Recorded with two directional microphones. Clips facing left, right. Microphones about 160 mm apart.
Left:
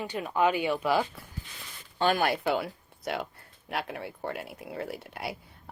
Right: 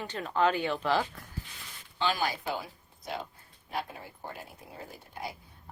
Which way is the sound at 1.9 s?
55° left (ahead or behind).